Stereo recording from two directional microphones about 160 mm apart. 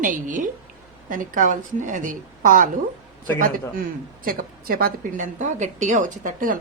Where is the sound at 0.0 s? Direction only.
55° right (ahead or behind).